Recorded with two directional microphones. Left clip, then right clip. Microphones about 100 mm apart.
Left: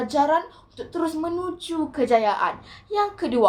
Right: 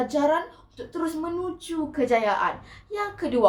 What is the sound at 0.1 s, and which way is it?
A woman's voice, 15° left (ahead or behind).